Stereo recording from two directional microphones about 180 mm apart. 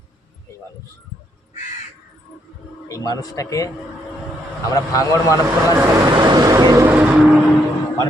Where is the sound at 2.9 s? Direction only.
20° left (ahead or behind).